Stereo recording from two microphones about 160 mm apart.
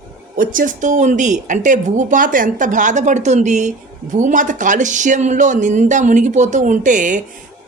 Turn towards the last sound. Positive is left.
turn(degrees=-55)  # may be behind; listen again after turning